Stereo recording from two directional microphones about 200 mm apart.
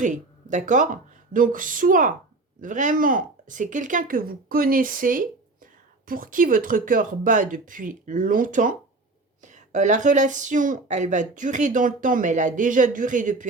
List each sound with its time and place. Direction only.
0.0 s speech: 40° right (ahead or behind)